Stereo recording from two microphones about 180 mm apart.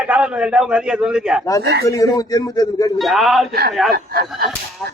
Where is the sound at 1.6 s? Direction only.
65° right (ahead or behind).